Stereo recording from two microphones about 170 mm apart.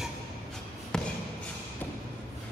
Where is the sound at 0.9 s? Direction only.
5° left (ahead or behind).